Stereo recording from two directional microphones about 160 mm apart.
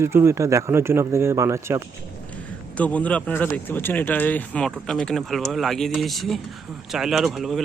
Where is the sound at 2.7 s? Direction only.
10° left (ahead or behind).